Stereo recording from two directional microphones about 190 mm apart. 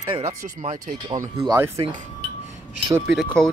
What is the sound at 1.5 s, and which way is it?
Speech, 15° right (ahead or behind).